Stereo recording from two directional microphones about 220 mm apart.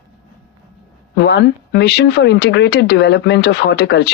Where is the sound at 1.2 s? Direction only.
50° left (ahead or behind).